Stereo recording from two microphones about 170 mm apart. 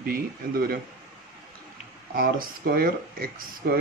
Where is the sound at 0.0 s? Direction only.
60° right (ahead or behind).